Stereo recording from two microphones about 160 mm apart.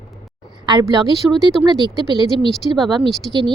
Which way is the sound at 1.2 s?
10° right (ahead or behind).